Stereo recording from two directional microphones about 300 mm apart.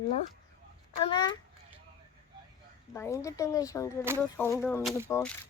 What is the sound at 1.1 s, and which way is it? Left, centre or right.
Speech, centre.